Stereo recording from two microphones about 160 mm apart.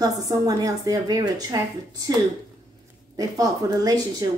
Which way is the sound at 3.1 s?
20° right (ahead or behind).